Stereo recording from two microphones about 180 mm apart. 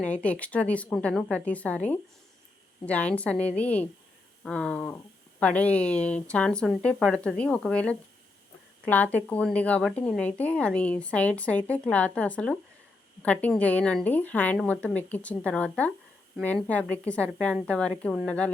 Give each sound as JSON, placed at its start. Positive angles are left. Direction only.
{"t": 0.0, "sound": "a woman's voice", "side_deg": 5}
{"t": 2.8, "sound": "a woman's voice", "side_deg": 5}